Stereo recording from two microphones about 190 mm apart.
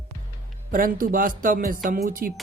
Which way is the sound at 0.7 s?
45° right (ahead or behind).